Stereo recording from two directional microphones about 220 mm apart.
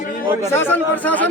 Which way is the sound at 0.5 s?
10° left (ahead or behind).